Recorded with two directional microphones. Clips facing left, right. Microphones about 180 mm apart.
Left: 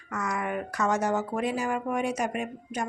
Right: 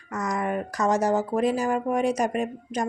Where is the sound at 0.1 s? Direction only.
40° right (ahead or behind).